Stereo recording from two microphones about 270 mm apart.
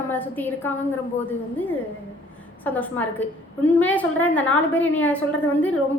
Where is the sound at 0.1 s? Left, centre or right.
Centre.